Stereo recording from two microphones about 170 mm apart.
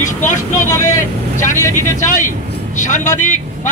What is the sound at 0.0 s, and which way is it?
Speech, 50° left (ahead or behind).